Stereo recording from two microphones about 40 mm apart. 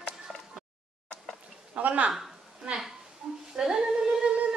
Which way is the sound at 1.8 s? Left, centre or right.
Right.